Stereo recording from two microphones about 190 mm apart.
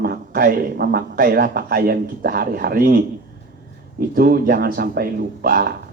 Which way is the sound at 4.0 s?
50° right (ahead or behind).